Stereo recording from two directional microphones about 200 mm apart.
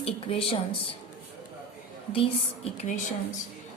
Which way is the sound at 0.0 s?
30° left (ahead or behind).